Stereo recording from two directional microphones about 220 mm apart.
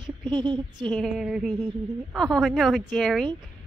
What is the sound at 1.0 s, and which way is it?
A woman's voice, centre (ahead or behind).